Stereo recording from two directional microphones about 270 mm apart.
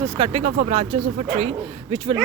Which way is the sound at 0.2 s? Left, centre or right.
Right.